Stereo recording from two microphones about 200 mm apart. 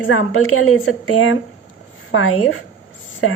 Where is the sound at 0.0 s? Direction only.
85° left.